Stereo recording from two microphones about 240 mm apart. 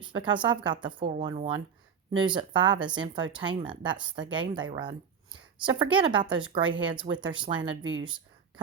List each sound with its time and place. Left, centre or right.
0.0 s speech: centre
7.8 s speech: right